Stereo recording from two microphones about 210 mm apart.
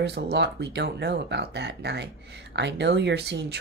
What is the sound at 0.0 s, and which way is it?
Speech, 55° right (ahead or behind).